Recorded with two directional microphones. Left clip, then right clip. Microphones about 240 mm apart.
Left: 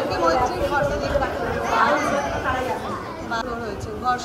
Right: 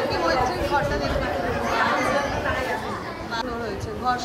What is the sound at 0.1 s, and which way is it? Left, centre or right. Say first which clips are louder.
Chatter: left 5 dB; centre.